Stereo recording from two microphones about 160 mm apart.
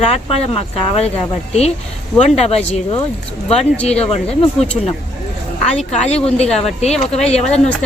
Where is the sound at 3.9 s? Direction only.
40° left (ahead or behind).